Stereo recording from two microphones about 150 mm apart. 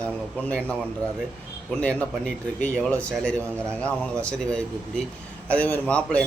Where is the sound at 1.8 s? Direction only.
10° left (ahead or behind).